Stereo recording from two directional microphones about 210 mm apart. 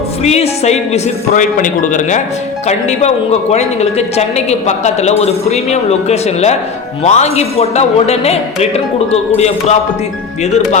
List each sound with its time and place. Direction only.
0.2 s a woman's voice: 30° left (ahead or behind)